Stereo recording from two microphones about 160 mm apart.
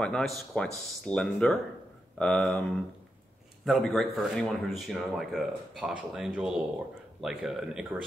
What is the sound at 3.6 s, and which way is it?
Speech, centre (ahead or behind).